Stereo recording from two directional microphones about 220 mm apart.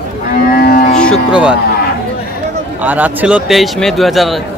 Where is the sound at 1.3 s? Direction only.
5° right (ahead or behind).